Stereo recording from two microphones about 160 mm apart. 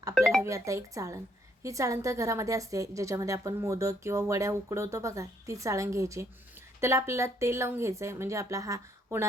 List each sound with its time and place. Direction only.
0.1 s music: centre (ahead or behind)
0.4 s a woman's voice: 20° right (ahead or behind)